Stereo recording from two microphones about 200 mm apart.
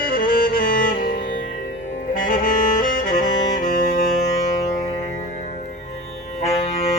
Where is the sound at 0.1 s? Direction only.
45° left (ahead or behind).